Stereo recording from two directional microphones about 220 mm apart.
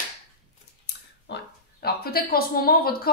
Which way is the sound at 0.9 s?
45° left (ahead or behind).